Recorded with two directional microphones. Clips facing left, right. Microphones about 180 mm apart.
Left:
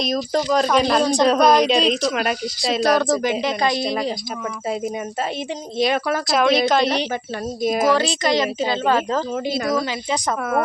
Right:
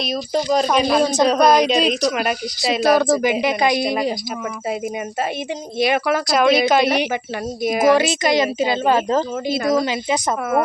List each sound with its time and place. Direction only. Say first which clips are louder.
0.0 s a woman's voice: left 1 dB; 5° right (ahead or behind)
0.5 s a woman's voice: right 1 dB; 15° right (ahead or behind)
6.2 s a woman's voice: right 1 dB; centre (ahead or behind); by 10.2 s 20° right (ahead or behind)